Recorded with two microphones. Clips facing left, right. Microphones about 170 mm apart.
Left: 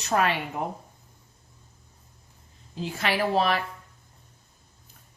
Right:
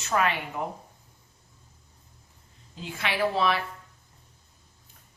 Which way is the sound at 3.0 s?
40° left (ahead or behind).